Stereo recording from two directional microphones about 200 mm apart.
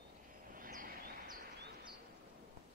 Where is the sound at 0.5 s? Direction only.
45° right (ahead or behind).